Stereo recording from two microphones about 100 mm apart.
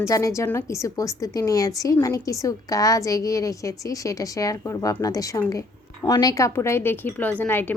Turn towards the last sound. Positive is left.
turn(degrees=20)  # may be behind; listen again after turning